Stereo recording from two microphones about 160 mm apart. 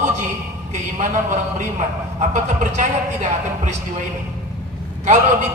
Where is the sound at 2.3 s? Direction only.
50° right (ahead or behind).